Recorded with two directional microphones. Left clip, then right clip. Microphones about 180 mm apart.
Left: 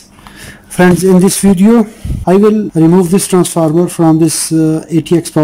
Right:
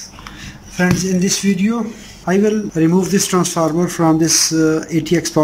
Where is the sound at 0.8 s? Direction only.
40° left (ahead or behind).